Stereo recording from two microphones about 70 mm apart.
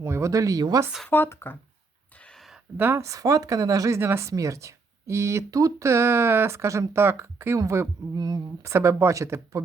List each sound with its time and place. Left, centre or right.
0.0 s speech: right
1.0 s speech: left
2.7 s speech: right
3.0 s speech: right
4.0 s speech: right
8.1 s speech: right
8.6 s speech: right